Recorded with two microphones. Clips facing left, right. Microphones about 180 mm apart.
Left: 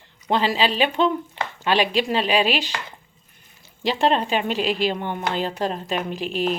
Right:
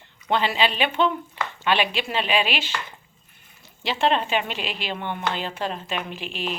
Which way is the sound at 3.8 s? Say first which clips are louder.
Left 2 dB; 40° left (ahead or behind).